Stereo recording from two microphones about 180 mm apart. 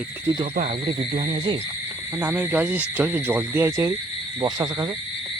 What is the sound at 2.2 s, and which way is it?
Speech, 10° right (ahead or behind).